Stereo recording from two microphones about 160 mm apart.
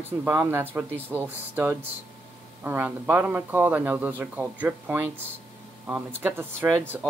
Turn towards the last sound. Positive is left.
turn(degrees=-5)  # may be behind; listen again after turning